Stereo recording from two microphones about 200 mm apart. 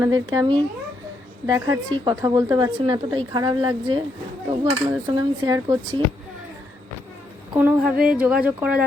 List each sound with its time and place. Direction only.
0.0 s a woman's voice: 20° right (ahead or behind)
7.5 s speech: 5° right (ahead or behind)